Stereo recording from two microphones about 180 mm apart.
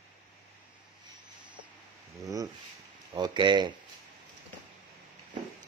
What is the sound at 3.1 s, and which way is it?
Speech, 25° right (ahead or behind).